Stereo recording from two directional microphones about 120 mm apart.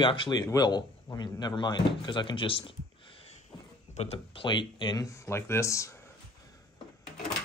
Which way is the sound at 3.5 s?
40° left (ahead or behind).